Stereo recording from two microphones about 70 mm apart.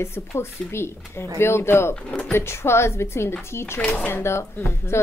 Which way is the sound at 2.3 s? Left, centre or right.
Left.